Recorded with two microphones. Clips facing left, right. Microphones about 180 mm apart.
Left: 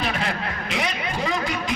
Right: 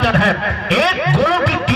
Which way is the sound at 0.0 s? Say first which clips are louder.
Right 10 dB; 70° right (ahead or behind).